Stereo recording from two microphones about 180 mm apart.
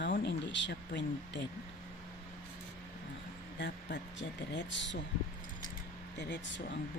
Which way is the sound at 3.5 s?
75° left (ahead or behind).